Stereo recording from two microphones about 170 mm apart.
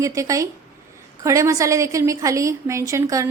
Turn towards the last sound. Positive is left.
turn(degrees=-20)  # may be behind; listen again after turning